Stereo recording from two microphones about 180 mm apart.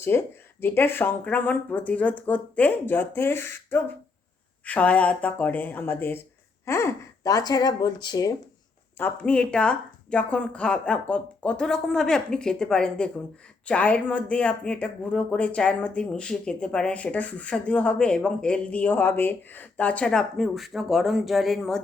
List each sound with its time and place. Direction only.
0.1 s speech: 10° left (ahead or behind)
9.0 s speech: 10° left (ahead or behind)